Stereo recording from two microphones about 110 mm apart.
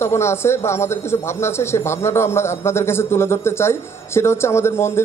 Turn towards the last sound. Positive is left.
turn(degrees=25)  # may be behind; listen again after turning